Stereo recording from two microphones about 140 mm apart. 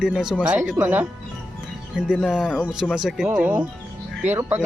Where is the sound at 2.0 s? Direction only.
5° right (ahead or behind).